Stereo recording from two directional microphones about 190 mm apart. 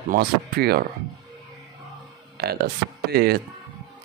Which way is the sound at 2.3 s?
55° right (ahead or behind).